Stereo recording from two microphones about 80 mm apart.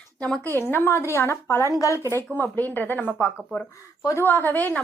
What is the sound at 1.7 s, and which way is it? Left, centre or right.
Speech, left.